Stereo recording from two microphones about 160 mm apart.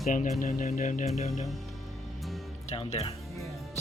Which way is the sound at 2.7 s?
40° left (ahead or behind).